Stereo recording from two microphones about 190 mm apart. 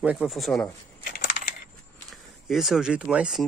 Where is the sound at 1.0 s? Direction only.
50° left (ahead or behind).